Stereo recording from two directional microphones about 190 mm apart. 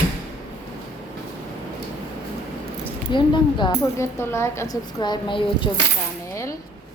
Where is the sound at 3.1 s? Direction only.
25° left (ahead or behind).